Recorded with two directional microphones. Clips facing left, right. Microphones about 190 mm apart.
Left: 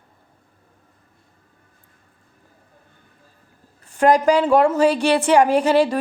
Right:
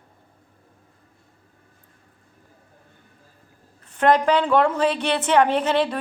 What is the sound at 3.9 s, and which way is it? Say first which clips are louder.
A woman's voice: left 3 dB; 10° left (ahead or behind).